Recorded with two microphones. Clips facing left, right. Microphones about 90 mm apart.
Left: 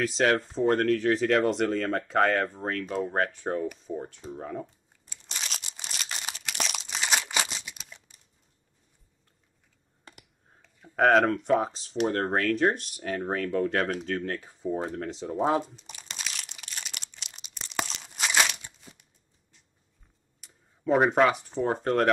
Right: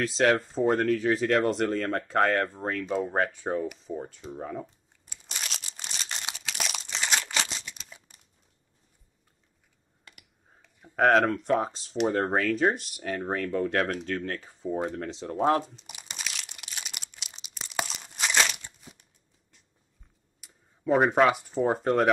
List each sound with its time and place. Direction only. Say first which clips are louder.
0.0 s speech: right 1 dB; centre (ahead or behind)
6.2 s crunch: left 2 dB; centre (ahead or behind)
6.9 s a sound: even; 10° left (ahead or behind)
10.1 s computer keyboard: left 4 dB; 35° left (ahead or behind)
11.0 s speech: left 1 dB; centre (ahead or behind)
15.9 s crumpling: even; 10° right (ahead or behind); by 18.7 s 5° left (ahead or behind)
20.3 s speech: even; 5° right (ahead or behind)